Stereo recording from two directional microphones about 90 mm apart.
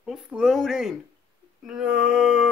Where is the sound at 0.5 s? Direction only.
Centre (ahead or behind).